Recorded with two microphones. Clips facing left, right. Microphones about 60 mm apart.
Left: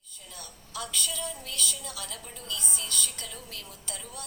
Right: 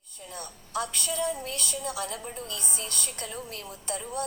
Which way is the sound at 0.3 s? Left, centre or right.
Right.